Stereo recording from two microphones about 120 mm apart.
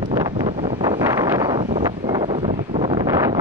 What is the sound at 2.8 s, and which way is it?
Wind noise, 30° right (ahead or behind).